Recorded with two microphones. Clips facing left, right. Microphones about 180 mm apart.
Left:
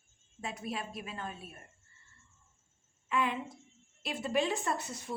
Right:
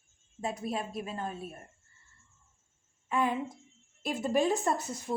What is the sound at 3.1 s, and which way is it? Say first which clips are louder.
A woman's voice: right 3 dB; 45° right (ahead or behind).